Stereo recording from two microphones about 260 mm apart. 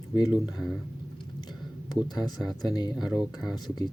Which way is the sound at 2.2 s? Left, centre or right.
Centre.